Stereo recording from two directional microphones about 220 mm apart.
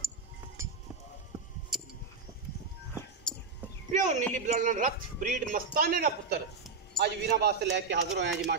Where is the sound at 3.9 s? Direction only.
35° right (ahead or behind).